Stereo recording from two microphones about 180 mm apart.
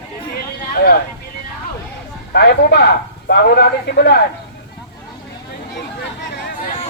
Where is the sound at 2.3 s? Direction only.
65° left (ahead or behind).